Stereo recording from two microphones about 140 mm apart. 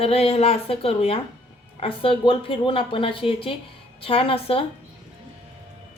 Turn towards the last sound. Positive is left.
turn(degrees=40)  # may be behind; listen again after turning